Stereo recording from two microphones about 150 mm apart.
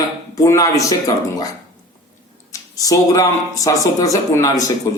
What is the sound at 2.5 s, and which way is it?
Speech, 20° left (ahead or behind).